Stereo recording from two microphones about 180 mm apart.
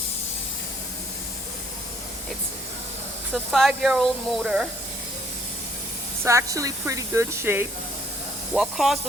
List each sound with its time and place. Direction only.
3.3 s speech: centre (ahead or behind)
6.2 s speech: 15° right (ahead or behind)
8.5 s speech: centre (ahead or behind)